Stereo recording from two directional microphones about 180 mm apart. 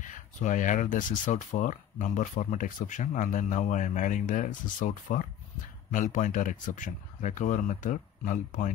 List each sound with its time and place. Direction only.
0.0 s speech: 45° left (ahead or behind)